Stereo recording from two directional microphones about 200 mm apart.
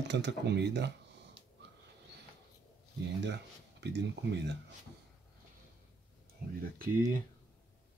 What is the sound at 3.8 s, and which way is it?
Speech, 60° right (ahead or behind).